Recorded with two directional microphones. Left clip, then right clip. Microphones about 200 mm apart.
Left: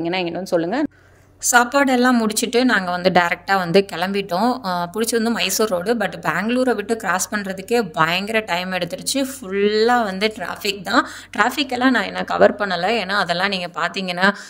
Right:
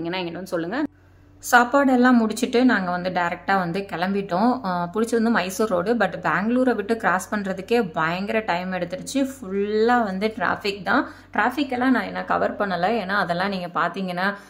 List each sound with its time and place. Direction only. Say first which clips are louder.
0.0 s speech: left 6 dB; 30° left (ahead or behind)
1.4 s speech: left 2 dB; 45° left (ahead or behind)